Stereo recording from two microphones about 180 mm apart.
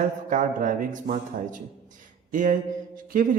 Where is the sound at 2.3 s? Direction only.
45° right (ahead or behind).